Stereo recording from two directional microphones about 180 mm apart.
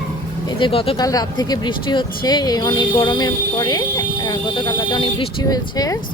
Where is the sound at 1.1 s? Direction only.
20° left (ahead or behind).